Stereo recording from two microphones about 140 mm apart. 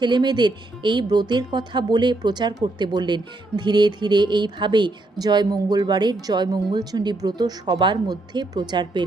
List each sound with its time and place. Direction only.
0.0 s speech: 30° right (ahead or behind)